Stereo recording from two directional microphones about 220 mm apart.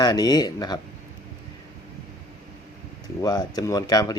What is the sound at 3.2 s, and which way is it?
Speech, 15° left (ahead or behind).